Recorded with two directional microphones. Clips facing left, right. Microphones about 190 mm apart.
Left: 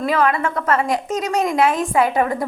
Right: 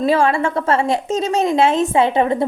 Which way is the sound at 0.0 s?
30° right (ahead or behind).